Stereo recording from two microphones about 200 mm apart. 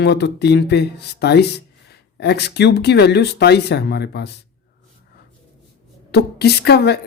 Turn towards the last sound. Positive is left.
turn(degrees=55)  # may be behind; listen again after turning